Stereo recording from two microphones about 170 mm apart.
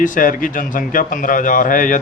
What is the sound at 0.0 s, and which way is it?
Speech, 50° left (ahead or behind).